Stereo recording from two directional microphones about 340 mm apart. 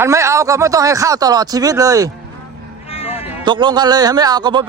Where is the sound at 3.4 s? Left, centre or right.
Centre.